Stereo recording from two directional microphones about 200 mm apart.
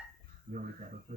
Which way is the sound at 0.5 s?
40° right (ahead or behind).